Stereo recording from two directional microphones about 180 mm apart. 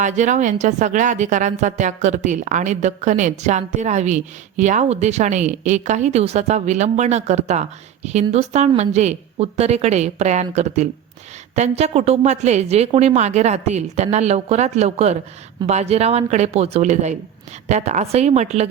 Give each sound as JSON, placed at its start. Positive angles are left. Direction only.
{"t": 0.0, "sound": "a woman's voice", "side_deg": -40}